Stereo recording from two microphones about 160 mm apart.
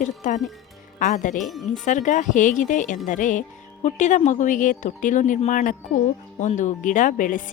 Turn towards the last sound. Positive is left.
turn(degrees=55)  # may be behind; listen again after turning